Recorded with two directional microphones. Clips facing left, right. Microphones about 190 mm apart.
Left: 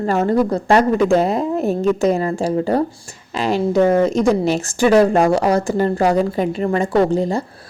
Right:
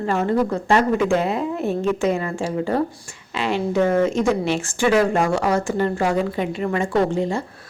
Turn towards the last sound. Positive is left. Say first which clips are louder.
# left 4 dB
turn(degrees=35)  # may be behind; listen again after turning